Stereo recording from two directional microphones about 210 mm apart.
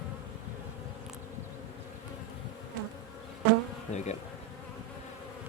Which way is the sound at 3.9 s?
35° left (ahead or behind).